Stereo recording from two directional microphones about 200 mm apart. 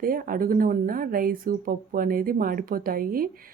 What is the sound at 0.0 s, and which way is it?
Speech, 45° right (ahead or behind).